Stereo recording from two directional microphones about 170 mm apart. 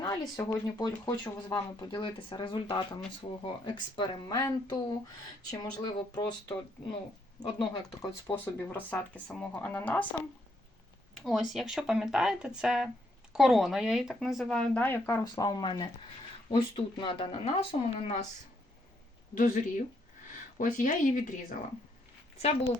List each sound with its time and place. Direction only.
0.0 s speech: 25° left (ahead or behind)
11.2 s speech: centre (ahead or behind); by 18.3 s 40° left (ahead or behind)
19.3 s speech: 50° left (ahead or behind)
22.4 s speech: 40° left (ahead or behind)